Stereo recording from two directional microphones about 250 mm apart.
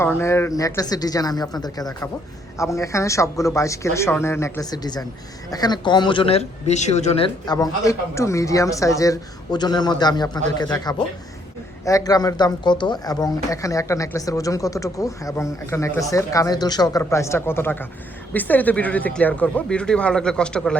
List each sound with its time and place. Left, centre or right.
0.0 s speech: centre